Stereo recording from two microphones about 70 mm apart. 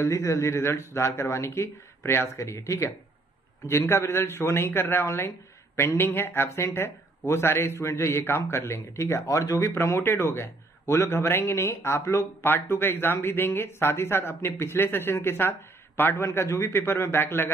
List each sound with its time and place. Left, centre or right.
0.0 s a man's voice: left